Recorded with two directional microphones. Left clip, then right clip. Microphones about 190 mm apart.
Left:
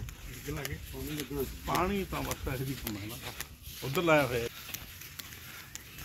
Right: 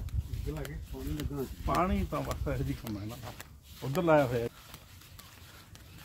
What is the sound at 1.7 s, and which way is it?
Speech, 65° right (ahead or behind).